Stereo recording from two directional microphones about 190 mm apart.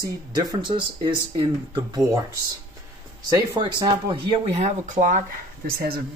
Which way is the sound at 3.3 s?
20° right (ahead or behind).